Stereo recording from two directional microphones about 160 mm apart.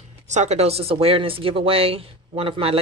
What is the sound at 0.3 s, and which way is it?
Speech, 45° right (ahead or behind).